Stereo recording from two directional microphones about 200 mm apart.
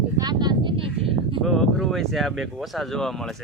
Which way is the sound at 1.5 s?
Centre (ahead or behind).